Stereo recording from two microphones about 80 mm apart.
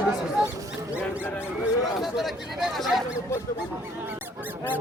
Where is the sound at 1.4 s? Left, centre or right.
Centre.